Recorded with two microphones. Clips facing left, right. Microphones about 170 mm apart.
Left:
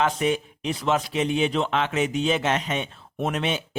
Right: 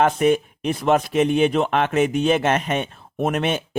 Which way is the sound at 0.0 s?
55° right (ahead or behind).